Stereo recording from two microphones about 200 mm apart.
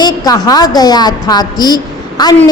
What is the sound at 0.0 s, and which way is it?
A woman's voice, 20° left (ahead or behind).